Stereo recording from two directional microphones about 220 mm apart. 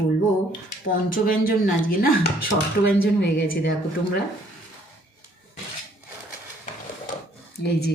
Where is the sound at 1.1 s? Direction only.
40° left (ahead or behind).